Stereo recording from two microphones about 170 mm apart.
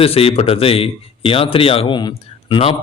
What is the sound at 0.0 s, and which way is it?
A man's voice, 35° left (ahead or behind).